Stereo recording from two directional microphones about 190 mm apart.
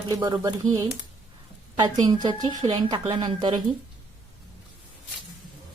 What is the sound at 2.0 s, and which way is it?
Speech, 20° right (ahead or behind).